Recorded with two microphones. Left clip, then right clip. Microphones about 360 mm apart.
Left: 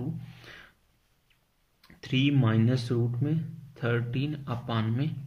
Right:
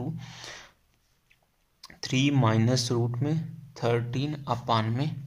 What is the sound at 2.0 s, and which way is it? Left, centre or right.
Speech, centre.